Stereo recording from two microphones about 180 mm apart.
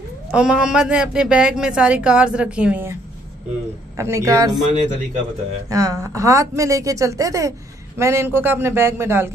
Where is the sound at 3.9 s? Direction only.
15° right (ahead or behind).